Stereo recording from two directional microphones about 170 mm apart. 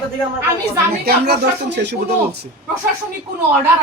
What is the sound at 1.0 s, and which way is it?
Speech, 75° right (ahead or behind).